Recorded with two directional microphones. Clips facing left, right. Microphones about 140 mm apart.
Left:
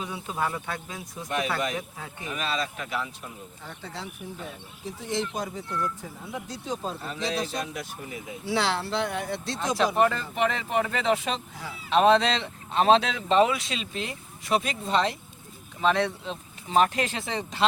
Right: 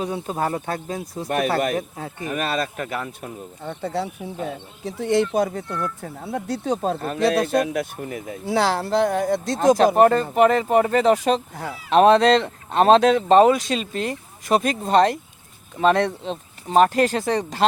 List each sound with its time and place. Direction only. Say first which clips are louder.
0.0 s speech: right 6 dB; 40° right (ahead or behind)
1.3 s speech: right 7 dB; 50° right (ahead or behind)
2.3 s speech: right 5 dB; 55° right (ahead or behind)